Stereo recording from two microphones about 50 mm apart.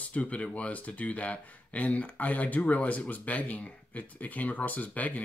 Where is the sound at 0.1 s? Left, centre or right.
Left.